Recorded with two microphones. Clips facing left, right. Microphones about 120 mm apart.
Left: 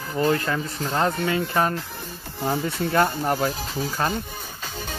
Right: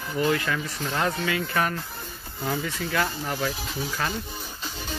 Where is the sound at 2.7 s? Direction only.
45° left (ahead or behind).